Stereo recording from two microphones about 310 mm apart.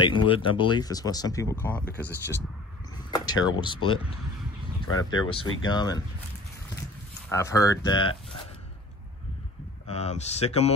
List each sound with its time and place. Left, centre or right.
0.0 s speech: centre
5.1 s speech: centre
7.2 s speech: centre
9.8 s speech: left